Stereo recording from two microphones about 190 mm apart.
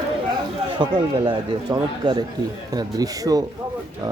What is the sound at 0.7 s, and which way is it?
A man's voice, 25° right (ahead or behind).